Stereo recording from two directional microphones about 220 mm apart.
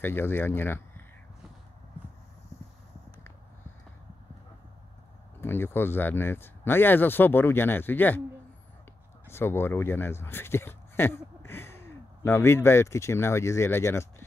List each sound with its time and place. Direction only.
0.0 s speech: 10° left (ahead or behind)
5.4 s speech: 10° left (ahead or behind)
9.3 s speech: 10° left (ahead or behind)